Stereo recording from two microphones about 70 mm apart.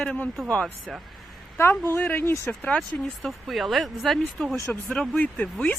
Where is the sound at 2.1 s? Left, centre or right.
Left.